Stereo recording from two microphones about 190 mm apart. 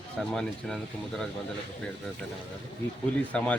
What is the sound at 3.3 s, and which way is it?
Speech, 5° left (ahead or behind).